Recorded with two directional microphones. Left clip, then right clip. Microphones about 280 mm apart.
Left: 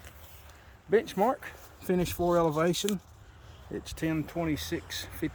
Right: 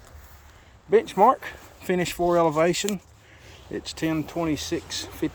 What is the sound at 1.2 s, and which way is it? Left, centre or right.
Speech, right.